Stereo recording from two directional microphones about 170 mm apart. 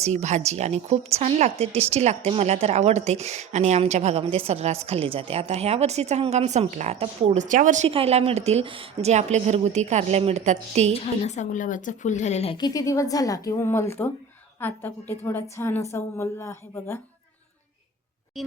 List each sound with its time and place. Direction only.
0.0 s speech: 40° right (ahead or behind)
10.9 s a woman's voice: 40° left (ahead or behind)
12.5 s a woman's voice: 20° left (ahead or behind)
18.4 s speech: centre (ahead or behind)